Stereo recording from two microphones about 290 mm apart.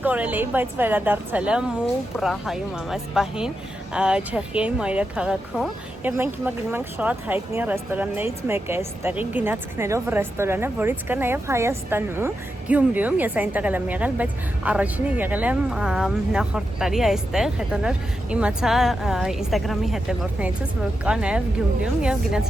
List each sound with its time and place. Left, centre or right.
0.0 s a woman's voice: centre